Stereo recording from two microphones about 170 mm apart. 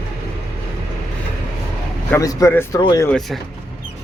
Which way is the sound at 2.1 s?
20° left (ahead or behind).